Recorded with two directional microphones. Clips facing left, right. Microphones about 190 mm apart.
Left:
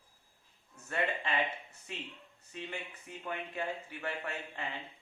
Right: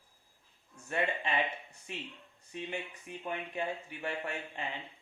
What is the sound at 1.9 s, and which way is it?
A man's voice, 20° right (ahead or behind).